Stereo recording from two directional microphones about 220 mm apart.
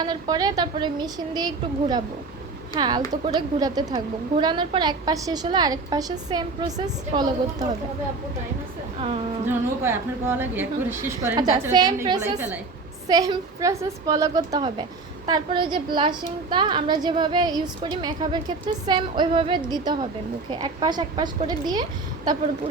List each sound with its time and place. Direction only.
0.0 s a woman's voice: 20° right (ahead or behind)
9.8 s a woman's voice: 10° right (ahead or behind)